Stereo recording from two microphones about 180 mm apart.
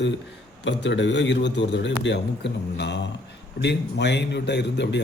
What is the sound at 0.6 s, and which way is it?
A man's voice, 80° left.